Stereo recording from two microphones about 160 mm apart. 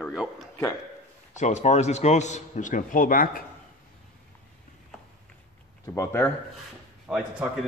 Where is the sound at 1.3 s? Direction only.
45° left (ahead or behind); by 3.4 s 60° left (ahead or behind).